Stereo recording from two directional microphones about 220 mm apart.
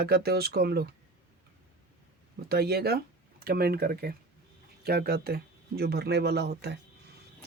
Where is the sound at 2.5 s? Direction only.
45° right (ahead or behind).